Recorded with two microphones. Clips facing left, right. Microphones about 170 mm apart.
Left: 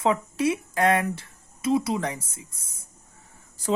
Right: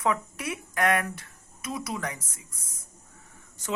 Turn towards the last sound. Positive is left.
turn(degrees=30)  # may be behind; listen again after turning